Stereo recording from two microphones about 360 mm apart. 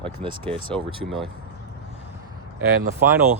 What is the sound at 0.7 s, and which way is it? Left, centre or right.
Speech, centre.